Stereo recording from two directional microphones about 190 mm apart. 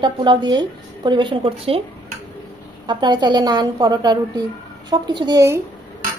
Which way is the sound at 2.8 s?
25° right (ahead or behind).